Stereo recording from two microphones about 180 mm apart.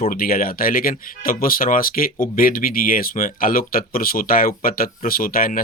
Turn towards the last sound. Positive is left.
turn(degrees=55)  # may be behind; listen again after turning